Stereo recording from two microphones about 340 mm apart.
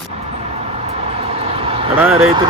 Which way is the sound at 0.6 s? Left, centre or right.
Centre.